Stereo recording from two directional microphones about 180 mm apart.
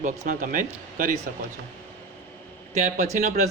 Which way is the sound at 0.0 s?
45° right (ahead or behind).